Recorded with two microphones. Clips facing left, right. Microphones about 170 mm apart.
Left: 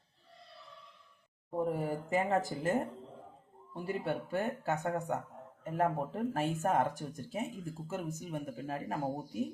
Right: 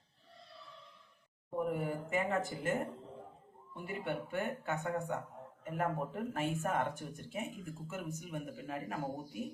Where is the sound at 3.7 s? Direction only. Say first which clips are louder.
Left 4 dB; 35° left (ahead or behind).